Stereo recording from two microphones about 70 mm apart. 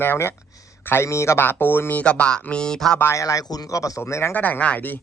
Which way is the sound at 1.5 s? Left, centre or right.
Left.